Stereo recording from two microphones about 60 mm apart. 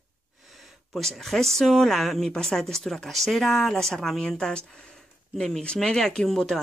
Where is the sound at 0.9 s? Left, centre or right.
Centre.